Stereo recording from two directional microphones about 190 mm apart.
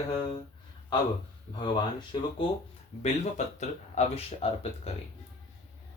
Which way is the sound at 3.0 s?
35° left (ahead or behind).